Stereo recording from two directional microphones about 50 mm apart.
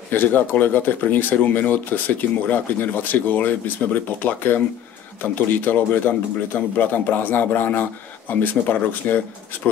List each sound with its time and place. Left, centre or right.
0.1 s speech: left